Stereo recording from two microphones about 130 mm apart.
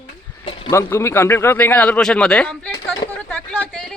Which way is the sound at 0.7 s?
20° left (ahead or behind).